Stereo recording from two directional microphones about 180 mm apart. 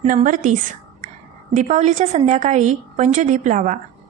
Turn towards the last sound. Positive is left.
turn(degrees=-45)  # may be behind; listen again after turning